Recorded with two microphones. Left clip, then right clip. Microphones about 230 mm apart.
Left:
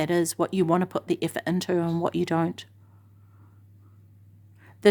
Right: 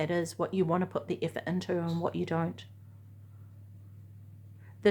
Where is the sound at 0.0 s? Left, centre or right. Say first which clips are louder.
Left 7 dB; left.